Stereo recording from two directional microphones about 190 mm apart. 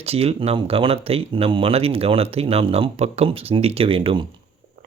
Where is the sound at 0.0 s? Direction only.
30° right (ahead or behind).